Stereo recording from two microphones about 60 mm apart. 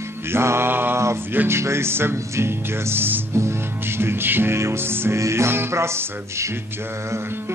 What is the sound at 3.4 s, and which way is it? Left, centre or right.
Music, right.